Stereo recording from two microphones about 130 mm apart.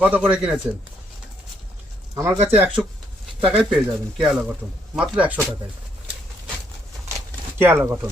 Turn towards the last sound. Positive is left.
turn(degrees=-15)  # may be behind; listen again after turning